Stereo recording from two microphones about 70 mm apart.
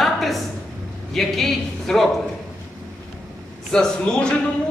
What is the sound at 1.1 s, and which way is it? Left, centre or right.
Speech, centre.